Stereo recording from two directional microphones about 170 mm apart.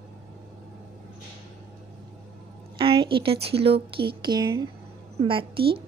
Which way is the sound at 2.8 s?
30° right (ahead or behind).